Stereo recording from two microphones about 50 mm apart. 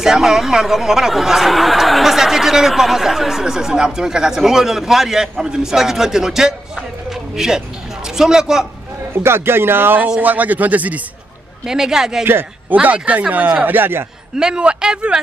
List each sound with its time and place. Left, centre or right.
0.0 s speech: centre
7.1 s a sound: centre
8.2 s speech: centre
9.2 s speech: right
10.2 s a man's voice: right
11.6 s speech: centre
12.3 s speech: right
12.8 s a man's voice: right
13.7 s speech: right
14.4 s speech: centre